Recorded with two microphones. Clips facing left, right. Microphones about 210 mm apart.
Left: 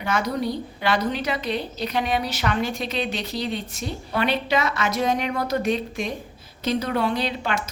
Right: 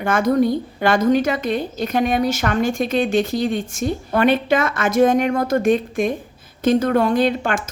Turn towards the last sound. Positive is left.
turn(degrees=-50)  # may be behind; listen again after turning